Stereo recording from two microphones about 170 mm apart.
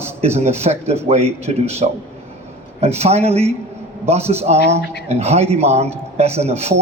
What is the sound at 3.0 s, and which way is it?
A man's voice, 40° right (ahead or behind).